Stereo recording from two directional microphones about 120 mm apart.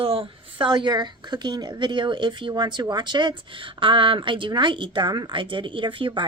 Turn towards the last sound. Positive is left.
turn(degrees=-45)  # may be behind; listen again after turning